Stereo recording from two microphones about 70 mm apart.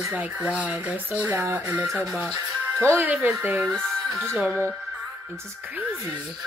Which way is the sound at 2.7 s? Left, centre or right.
Right.